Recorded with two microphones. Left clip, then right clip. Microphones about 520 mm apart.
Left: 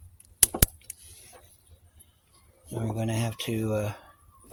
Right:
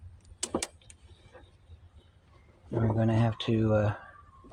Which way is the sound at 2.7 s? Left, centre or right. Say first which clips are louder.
Right 3 dB; left.